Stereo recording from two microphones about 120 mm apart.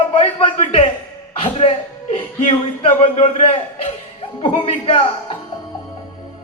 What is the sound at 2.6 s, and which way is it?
A man's voice, 55° left (ahead or behind).